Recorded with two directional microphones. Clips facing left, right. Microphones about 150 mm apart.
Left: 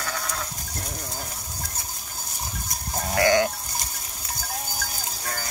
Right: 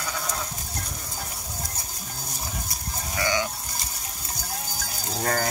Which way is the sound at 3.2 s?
55° left (ahead or behind).